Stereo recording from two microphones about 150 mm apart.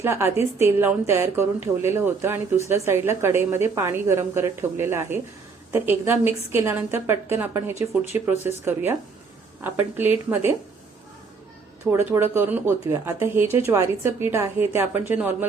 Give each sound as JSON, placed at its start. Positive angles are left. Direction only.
{"t": 0.0, "sound": "speech", "side_deg": -15}
{"t": 11.9, "sound": "speech", "side_deg": -15}